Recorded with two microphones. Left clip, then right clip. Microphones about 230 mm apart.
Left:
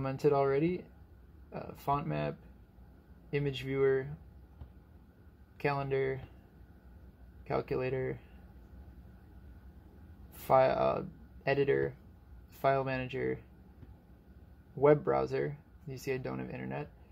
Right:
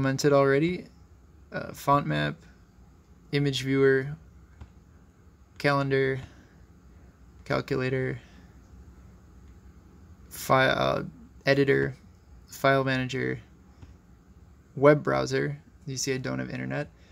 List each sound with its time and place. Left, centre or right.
0.0 s speech: right
5.6 s speech: right
7.4 s speech: right
10.4 s speech: right
14.8 s speech: right